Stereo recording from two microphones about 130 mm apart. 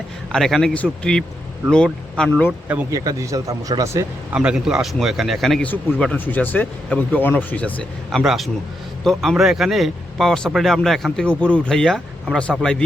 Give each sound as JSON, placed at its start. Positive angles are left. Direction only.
{"t": 0.3, "sound": "speech", "side_deg": 5}
{"t": 2.5, "sound": "speech", "side_deg": -15}
{"t": 2.9, "sound": "speech", "side_deg": -25}
{"t": 4.3, "sound": "speech", "side_deg": -5}
{"t": 8.2, "sound": "speech", "side_deg": 0}